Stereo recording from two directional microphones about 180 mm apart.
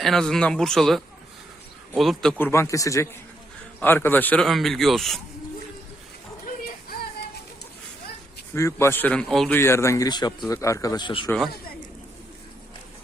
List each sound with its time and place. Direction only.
0.0 s a man's voice: centre (ahead or behind)
2.4 s a man's voice: 15° left (ahead or behind)
6.5 s a sound: 50° left (ahead or behind)
8.5 s a man's voice: 15° left (ahead or behind)